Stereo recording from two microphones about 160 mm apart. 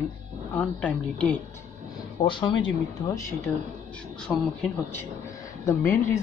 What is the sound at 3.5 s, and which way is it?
Speech, 10° left (ahead or behind).